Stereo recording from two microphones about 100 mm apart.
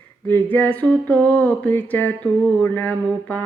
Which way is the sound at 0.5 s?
15° left (ahead or behind).